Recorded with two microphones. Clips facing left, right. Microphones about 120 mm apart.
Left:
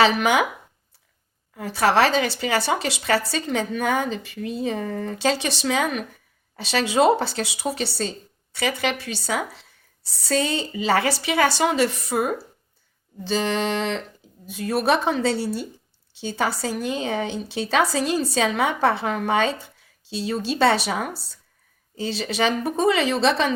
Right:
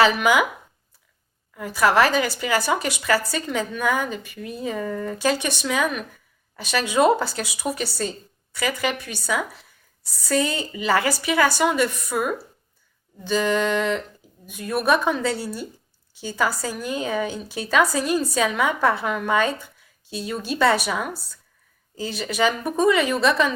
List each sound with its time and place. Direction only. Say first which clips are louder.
0.0 s a woman's voice: even; 25° left (ahead or behind)
1.5 s a woman's voice: even; 30° left (ahead or behind)
13.2 s a woman's voice: right 2 dB; 30° left (ahead or behind)